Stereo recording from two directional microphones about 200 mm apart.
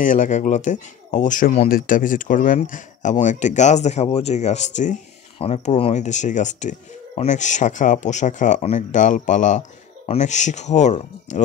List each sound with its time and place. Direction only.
0.0 s speech: 40° left (ahead or behind)